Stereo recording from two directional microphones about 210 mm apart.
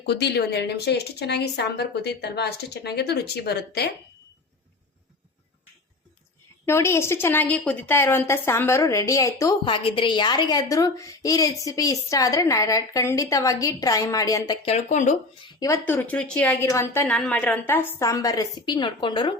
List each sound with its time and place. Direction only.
0.0 s speech: 50° left (ahead or behind)
6.7 s a woman's voice: 10° left (ahead or behind)
14.7 s speech: 35° left (ahead or behind)
15.4 s a woman's voice: 20° left (ahead or behind)